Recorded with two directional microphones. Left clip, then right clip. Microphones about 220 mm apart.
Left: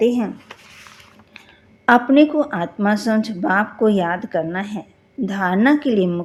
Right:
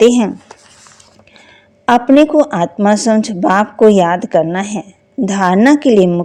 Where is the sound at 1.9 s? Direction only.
35° right (ahead or behind).